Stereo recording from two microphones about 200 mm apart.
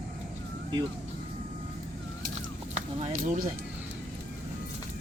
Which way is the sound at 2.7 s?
35° right (ahead or behind).